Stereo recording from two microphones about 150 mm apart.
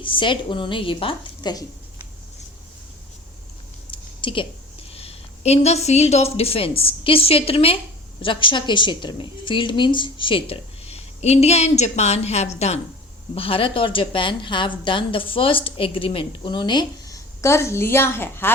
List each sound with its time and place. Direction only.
0.0 s a woman's voice: 35° left (ahead or behind)
3.9 s a woman's voice: 35° left (ahead or behind)
17.4 s a woman's voice: 20° left (ahead or behind)